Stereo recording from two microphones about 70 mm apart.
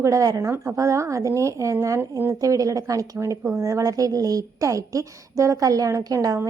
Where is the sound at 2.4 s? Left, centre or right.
Right.